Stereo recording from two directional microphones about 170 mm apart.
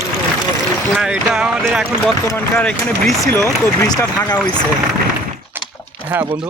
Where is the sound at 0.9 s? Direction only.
5° right (ahead or behind).